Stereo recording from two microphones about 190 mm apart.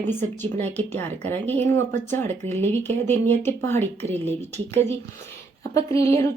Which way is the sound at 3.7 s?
35° right (ahead or behind).